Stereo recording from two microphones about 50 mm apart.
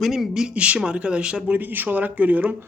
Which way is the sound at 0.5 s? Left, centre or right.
Right.